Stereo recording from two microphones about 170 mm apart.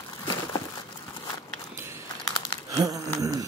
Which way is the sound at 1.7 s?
15° right (ahead or behind).